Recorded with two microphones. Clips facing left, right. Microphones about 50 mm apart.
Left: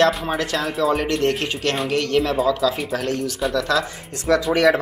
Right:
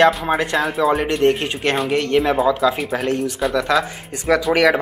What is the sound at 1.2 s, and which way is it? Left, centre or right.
Speech, right.